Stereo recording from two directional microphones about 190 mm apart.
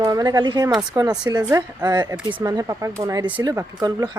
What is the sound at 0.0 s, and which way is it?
Speech, 20° right (ahead or behind).